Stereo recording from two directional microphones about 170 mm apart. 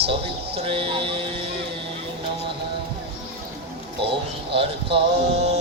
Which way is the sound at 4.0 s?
35° right (ahead or behind).